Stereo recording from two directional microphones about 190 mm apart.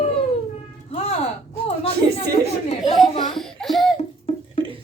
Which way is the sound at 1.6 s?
30° left (ahead or behind).